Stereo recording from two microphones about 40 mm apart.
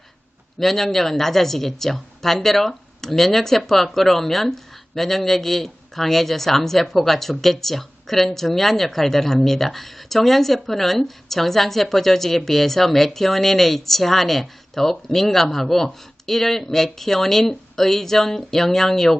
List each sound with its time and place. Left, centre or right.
0.6 s speech: centre